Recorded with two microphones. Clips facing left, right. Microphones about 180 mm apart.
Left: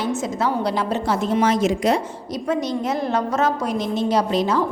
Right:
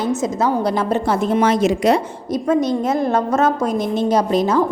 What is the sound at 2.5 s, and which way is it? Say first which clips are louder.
A woman's voice: right 5 dB; 50° right (ahead or behind).